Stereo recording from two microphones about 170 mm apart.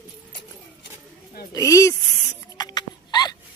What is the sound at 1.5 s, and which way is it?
Speech, 20° left (ahead or behind).